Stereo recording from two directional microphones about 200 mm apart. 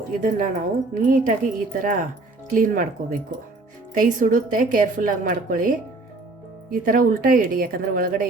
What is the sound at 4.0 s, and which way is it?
Speech, 40° right (ahead or behind).